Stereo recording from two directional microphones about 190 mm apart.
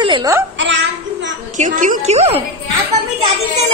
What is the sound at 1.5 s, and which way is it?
Speech, 45° right (ahead or behind).